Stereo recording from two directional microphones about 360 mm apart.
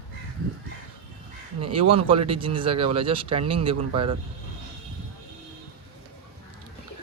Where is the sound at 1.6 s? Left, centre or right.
Centre.